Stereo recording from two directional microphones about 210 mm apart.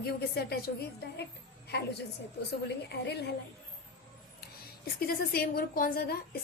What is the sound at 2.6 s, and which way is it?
Speech, 50° left (ahead or behind).